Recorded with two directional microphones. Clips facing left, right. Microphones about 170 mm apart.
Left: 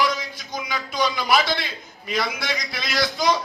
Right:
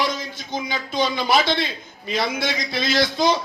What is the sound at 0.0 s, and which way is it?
A man's voice, 25° right (ahead or behind).